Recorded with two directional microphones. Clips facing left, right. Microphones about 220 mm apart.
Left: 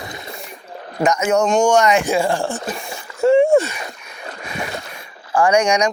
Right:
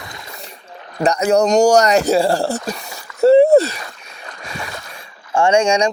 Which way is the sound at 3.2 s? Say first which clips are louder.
Right 3 dB; 35° right (ahead or behind).